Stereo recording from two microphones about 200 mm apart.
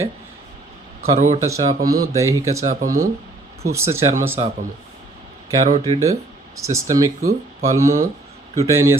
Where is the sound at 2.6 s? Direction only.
40° right (ahead or behind).